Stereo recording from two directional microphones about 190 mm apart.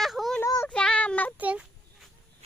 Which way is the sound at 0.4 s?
15° left (ahead or behind).